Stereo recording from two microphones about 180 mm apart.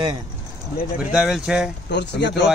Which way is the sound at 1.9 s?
75° left (ahead or behind).